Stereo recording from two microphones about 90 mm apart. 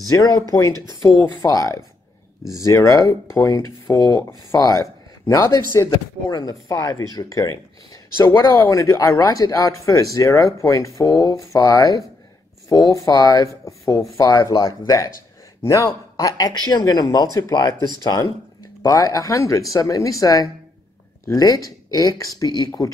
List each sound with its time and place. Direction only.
0.1 s speech: 45° left (ahead or behind)
5.9 s speech: 45° left (ahead or behind)
16.2 s speech: 45° left (ahead or behind)